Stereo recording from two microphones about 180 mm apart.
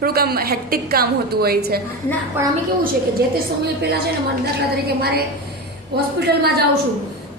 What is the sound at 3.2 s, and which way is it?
Speech, 60° right (ahead or behind).